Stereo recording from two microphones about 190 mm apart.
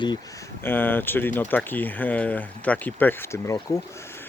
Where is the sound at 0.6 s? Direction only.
10° left (ahead or behind).